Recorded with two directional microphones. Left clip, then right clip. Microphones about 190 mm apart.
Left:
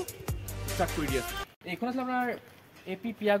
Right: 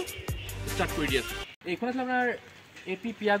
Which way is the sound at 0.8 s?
30° left (ahead or behind).